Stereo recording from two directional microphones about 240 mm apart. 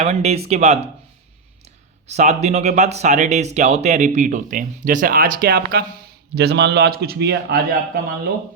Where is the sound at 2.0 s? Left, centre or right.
Right.